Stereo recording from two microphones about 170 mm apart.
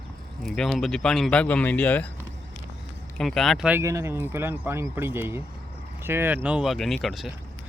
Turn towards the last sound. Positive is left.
turn(degrees=0)  # may be behind; listen again after turning